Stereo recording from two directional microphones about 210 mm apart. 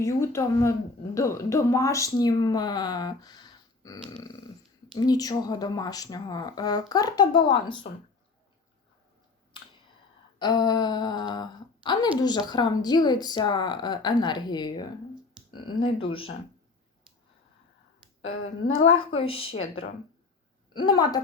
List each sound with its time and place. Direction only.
0.0 s speech: 15° left (ahead or behind)
10.3 s speech: 20° left (ahead or behind)
18.7 s a woman's voice: 75° left (ahead or behind)
19.1 s speech: 25° left (ahead or behind)
20.7 s speech: 20° left (ahead or behind)